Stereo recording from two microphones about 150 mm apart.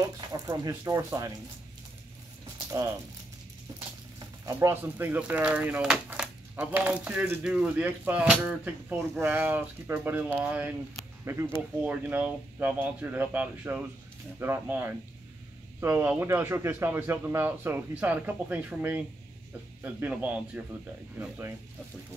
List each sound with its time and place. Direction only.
0.3 s speech: 25° right (ahead or behind)
4.5 s speech: 15° right (ahead or behind)